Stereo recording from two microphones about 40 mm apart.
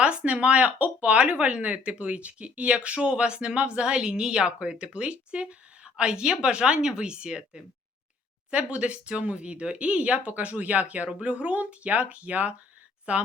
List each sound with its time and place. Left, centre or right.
0.0 s speech: right